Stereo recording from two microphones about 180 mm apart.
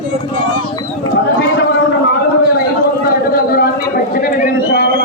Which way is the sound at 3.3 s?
55° left (ahead or behind).